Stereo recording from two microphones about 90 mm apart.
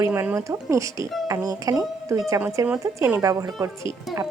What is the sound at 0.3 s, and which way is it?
A woman's voice, 35° right (ahead or behind).